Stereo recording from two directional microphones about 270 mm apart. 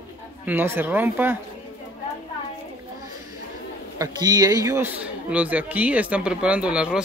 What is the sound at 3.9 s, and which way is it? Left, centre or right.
A man's voice, centre.